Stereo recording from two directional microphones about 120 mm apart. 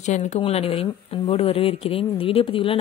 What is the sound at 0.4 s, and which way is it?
Speech, 55° left (ahead or behind).